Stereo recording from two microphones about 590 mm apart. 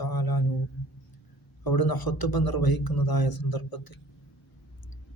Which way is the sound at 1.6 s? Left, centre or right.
Left.